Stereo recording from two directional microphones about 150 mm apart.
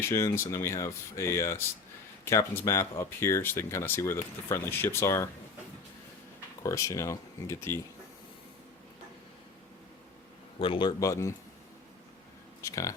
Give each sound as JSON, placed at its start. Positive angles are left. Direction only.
{"t": 0.0, "sound": "speech", "side_deg": 15}
{"t": 6.6, "sound": "speech", "side_deg": 20}
{"t": 10.6, "sound": "a man's voice", "side_deg": 35}
{"t": 11.0, "sound": "speech", "side_deg": 20}
{"t": 12.6, "sound": "speech", "side_deg": 20}